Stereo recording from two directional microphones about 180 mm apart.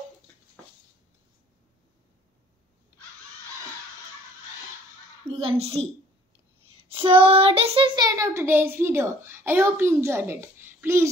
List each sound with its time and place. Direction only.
5.5 s a woman's voice: 35° right (ahead or behind)
6.8 s female singing: 30° right (ahead or behind)
7.2 s a child's voice: 30° right (ahead or behind); by 11.1 s 15° right (ahead or behind)